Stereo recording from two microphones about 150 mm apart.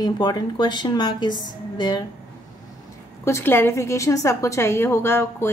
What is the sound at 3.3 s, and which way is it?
A woman's voice, 15° left (ahead or behind).